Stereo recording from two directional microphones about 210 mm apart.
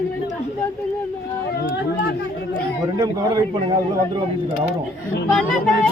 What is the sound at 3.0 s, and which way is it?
Speech, 20° right (ahead or behind).